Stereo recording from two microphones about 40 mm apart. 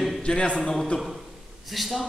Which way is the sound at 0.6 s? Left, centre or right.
Centre.